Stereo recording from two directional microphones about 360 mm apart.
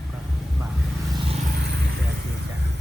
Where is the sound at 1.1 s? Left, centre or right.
Centre.